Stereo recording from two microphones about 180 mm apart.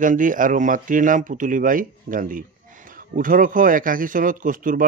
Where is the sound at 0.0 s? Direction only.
45° right (ahead or behind).